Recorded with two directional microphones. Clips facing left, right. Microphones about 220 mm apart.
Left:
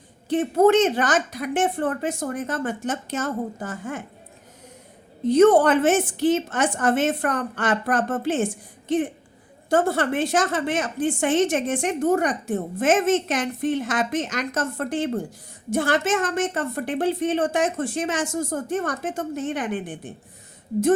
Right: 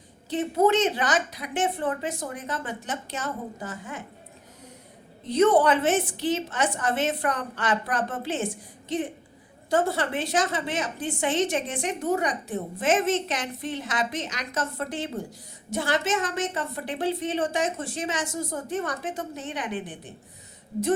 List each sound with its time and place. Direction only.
0.3 s a woman's voice: 50° left (ahead or behind)
5.3 s a woman's voice: 50° left (ahead or behind)